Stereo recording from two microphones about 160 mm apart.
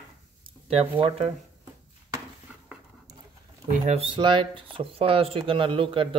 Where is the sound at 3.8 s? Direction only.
40° right (ahead or behind).